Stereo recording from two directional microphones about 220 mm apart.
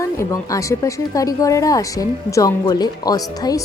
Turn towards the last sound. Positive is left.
turn(degrees=15)  # may be behind; listen again after turning